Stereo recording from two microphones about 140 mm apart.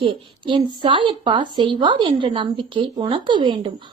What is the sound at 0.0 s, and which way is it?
Speech, 35° right (ahead or behind).